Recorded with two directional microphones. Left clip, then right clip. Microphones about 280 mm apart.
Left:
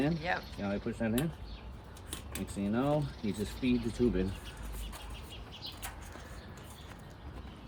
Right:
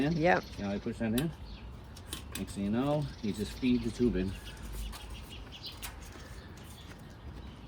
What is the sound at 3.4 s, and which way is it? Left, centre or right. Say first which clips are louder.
Speech: right 1 dB; left.